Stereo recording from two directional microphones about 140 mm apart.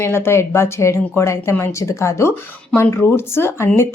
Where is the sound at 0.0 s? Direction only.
15° left (ahead or behind).